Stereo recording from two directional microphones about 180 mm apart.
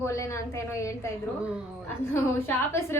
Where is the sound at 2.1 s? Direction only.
15° left (ahead or behind).